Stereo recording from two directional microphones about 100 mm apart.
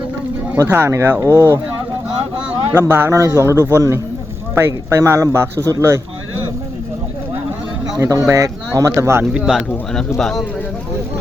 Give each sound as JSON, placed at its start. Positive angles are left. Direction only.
{"t": 0.5, "sound": "speech", "side_deg": -25}
{"t": 2.7, "sound": "speech", "side_deg": -20}
{"t": 7.9, "sound": "speech", "side_deg": -30}
{"t": 9.3, "sound": "speech", "side_deg": -5}